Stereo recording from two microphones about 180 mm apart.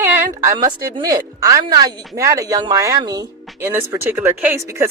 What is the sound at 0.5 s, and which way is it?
Speech, 25° right (ahead or behind).